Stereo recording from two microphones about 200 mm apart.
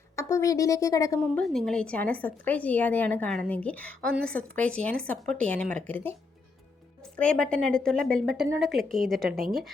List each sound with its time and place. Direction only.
0.2 s a woman's voice: 15° left (ahead or behind)
1.2 s a woman's voice: 5° left (ahead or behind)